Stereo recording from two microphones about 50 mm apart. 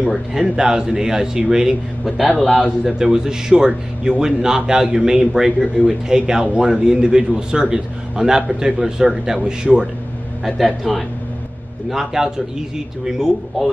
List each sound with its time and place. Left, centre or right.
0.3 s a man's voice: centre
2.3 s speech: centre
2.8 s a man's voice: centre
10.4 s a man's voice: centre